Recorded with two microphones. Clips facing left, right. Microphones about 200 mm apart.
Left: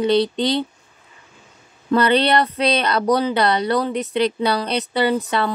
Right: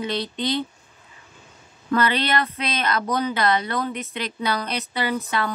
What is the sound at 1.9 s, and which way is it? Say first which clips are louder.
Speech: left 6 dB; 35° left (ahead or behind).